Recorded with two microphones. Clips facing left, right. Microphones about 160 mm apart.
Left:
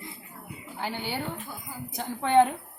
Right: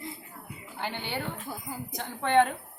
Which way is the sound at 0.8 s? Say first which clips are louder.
Left 2 dB; 5° left (ahead or behind).